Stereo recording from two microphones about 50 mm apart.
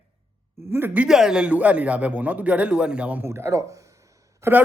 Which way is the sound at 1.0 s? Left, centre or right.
Centre.